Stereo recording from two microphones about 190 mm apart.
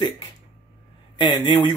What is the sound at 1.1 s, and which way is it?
Speech, 25° left (ahead or behind).